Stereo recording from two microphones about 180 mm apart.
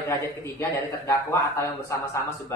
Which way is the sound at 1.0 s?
15° left (ahead or behind).